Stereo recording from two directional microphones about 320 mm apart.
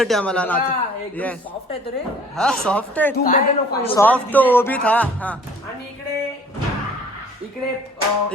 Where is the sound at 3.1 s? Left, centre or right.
Left.